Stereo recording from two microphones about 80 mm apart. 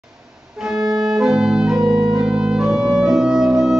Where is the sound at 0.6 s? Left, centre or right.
Centre.